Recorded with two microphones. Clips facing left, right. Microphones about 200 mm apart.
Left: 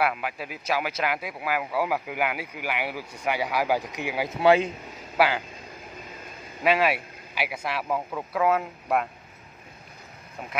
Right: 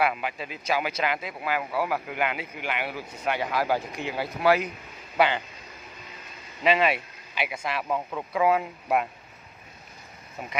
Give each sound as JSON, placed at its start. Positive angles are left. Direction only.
{"t": 0.0, "sound": "speech", "side_deg": 0}
{"t": 4.4, "sound": "speech", "side_deg": 25}
{"t": 5.1, "sound": "a man's voice", "side_deg": 5}
{"t": 6.6, "sound": "a man's voice", "side_deg": 5}